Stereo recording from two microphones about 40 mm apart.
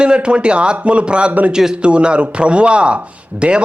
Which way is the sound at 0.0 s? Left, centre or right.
Right.